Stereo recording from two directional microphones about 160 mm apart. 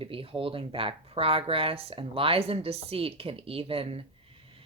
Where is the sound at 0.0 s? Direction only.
35° right (ahead or behind).